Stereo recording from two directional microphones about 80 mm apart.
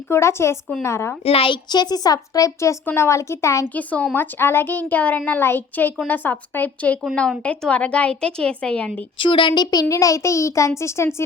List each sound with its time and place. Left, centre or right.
0.1 s speech: left
1.5 s a woman's voice: left
2.1 s speech: left
2.8 s speech: left
3.8 s a woman's voice: centre
4.2 s a woman's voice: left
7.2 s a woman's voice: centre
9.1 s speech: left
9.9 s speech: left